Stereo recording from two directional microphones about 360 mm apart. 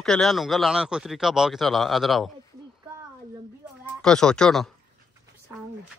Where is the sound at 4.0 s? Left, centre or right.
Centre.